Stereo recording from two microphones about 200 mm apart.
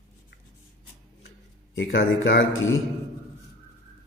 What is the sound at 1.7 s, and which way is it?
Speech, 65° left (ahead or behind).